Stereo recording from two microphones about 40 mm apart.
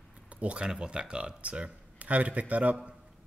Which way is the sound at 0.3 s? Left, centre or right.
Right.